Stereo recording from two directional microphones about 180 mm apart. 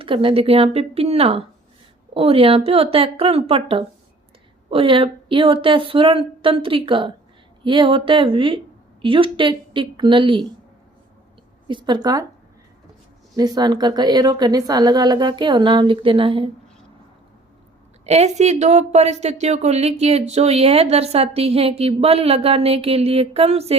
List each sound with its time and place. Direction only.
0.0 s a woman's voice: 30° right (ahead or behind)
11.7 s a woman's voice: 25° right (ahead or behind)
13.3 s a woman's voice: 20° right (ahead or behind)
18.0 s speech: 40° right (ahead or behind)